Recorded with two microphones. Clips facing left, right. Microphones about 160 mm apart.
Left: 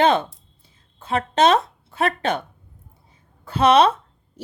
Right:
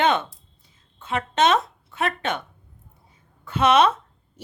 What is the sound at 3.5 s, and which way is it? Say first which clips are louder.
Speech: left 3 dB; 35° left (ahead or behind).